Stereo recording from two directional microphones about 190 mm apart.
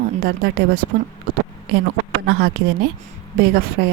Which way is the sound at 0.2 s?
50° right (ahead or behind).